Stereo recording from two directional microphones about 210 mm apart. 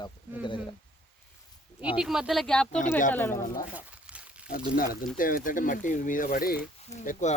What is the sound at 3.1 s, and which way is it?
Speech, 10° left (ahead or behind).